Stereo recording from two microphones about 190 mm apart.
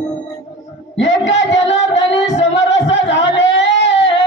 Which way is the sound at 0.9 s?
75° left (ahead or behind).